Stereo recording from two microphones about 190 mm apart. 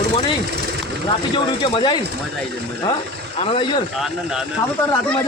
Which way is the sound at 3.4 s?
30° left (ahead or behind).